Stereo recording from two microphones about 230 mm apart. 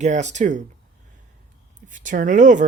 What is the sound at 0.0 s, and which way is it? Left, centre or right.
Speech, right.